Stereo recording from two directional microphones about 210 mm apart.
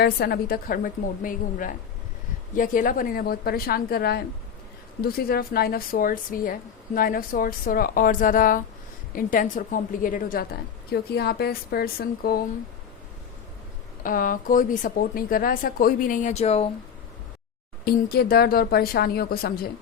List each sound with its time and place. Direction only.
0.0 s a woman's voice: 50° left (ahead or behind)
14.0 s speech: 40° left (ahead or behind)
17.8 s a woman's voice: 45° left (ahead or behind)